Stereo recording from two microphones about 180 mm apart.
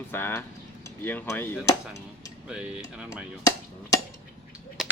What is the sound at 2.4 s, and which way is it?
Speech, 5° right (ahead or behind).